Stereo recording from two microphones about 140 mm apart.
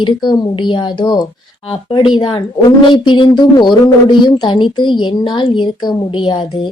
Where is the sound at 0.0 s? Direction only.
35° left (ahead or behind).